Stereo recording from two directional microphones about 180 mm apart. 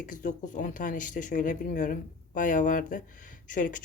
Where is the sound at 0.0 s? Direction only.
45° left (ahead or behind).